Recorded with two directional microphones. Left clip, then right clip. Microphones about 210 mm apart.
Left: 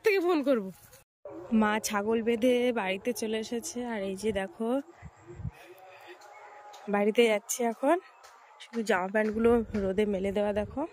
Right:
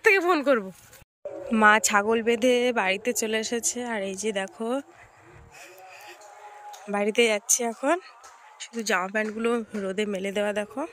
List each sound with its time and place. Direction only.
0.0 s sheep: 5° left (ahead or behind)
1.5 s a woman's voice: 5° left (ahead or behind)
6.9 s speech: 10° left (ahead or behind)